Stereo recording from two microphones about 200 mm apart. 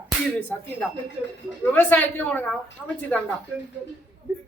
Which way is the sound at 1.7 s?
10° left (ahead or behind).